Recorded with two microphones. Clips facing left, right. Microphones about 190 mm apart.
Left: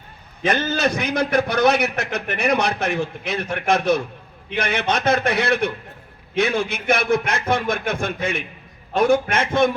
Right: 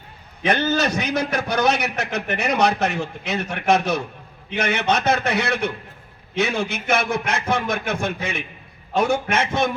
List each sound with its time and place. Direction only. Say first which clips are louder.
0.7 s a man's voice: even; 60° left (ahead or behind)